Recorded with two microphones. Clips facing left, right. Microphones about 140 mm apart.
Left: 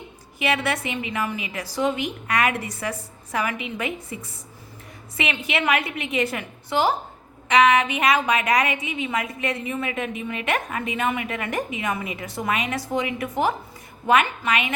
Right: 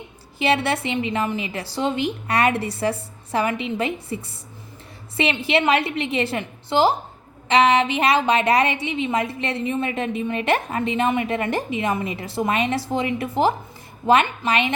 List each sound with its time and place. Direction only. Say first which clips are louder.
0.3 s a woman's voice: right 3 dB; 30° right (ahead or behind)